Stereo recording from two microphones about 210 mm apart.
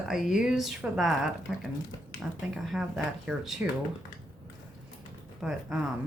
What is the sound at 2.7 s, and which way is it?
A woman's voice, centre (ahead or behind).